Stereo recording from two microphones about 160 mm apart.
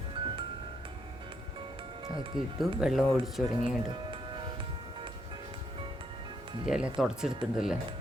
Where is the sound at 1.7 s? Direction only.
30° right (ahead or behind).